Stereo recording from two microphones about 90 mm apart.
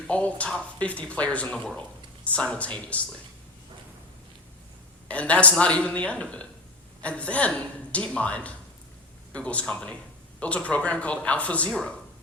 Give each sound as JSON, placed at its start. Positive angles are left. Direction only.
{"t": 0.1, "sound": "speech", "side_deg": 15}
{"t": 5.0, "sound": "speech", "side_deg": 15}